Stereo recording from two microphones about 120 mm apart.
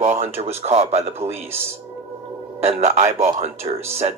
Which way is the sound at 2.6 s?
60° right (ahead or behind).